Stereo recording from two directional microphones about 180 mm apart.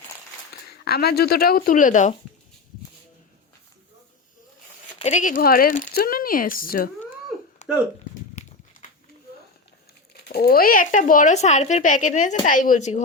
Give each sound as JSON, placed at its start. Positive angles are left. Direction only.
{"t": 0.7, "sound": "speech", "side_deg": 60}
{"t": 4.9, "sound": "speech", "side_deg": 40}
{"t": 7.6, "sound": "a sound", "side_deg": 40}
{"t": 10.2, "sound": "speech", "side_deg": 60}